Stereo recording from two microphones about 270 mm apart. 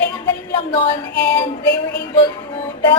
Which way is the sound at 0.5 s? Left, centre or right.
Centre.